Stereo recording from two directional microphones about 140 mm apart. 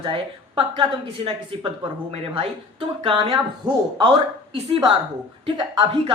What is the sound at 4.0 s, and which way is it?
A woman's voice, 40° right (ahead or behind).